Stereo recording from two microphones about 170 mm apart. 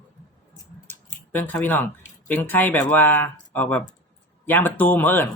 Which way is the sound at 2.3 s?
10° left (ahead or behind).